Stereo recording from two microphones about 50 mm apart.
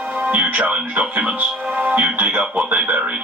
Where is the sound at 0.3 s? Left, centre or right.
Right.